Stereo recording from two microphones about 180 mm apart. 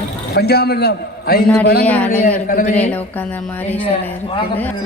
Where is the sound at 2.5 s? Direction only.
45° left (ahead or behind).